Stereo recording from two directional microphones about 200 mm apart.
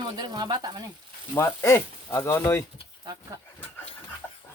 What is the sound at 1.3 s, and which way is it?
Speech, 15° left (ahead or behind).